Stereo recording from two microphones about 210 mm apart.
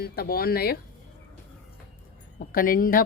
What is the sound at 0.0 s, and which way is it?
Speech, 45° left (ahead or behind).